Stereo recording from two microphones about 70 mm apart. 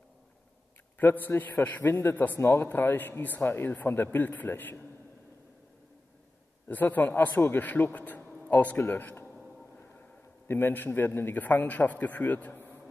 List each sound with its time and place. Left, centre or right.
0.9 s a man's voice: left
2.3 s speech: left
6.7 s speech: left
10.5 s speech: left